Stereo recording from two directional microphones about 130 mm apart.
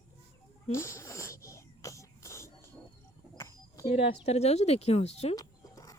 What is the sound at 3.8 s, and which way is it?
Speech, 50° left (ahead or behind).